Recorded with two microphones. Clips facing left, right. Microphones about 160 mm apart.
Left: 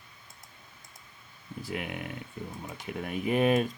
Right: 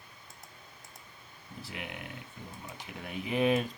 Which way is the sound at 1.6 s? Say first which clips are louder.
Left 7 dB; 55° left (ahead or behind).